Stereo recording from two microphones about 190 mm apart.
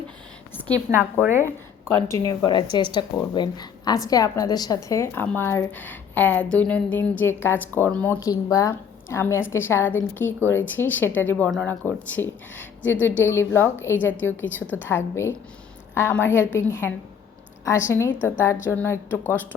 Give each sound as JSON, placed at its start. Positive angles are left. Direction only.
{"t": 0.7, "sound": "a woman's voice", "side_deg": -15}
{"t": 2.1, "sound": "a woman's voice", "side_deg": 20}